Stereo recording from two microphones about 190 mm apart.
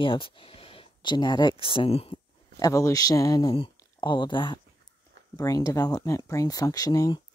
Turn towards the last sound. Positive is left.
turn(degrees=20)  # may be behind; listen again after turning